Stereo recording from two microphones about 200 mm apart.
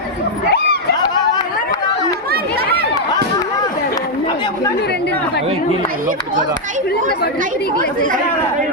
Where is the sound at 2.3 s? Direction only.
50° right (ahead or behind).